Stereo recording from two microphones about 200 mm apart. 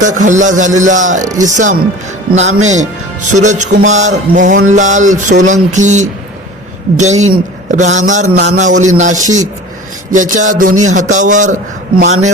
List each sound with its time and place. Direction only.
0.0 s a man's voice: 40° right (ahead or behind)